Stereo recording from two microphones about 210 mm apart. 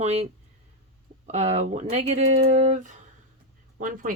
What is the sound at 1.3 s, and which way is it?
Speech, 35° right (ahead or behind).